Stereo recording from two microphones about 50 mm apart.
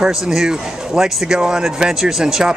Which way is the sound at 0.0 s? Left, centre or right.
Centre.